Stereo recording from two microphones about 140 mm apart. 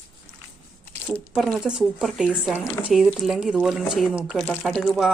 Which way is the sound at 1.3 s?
5° right (ahead or behind).